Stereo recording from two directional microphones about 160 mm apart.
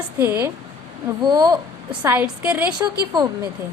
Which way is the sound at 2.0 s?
10° right (ahead or behind).